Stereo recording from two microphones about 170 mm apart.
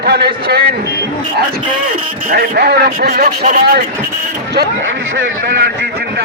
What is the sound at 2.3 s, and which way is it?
A man's voice, 65° right (ahead or behind).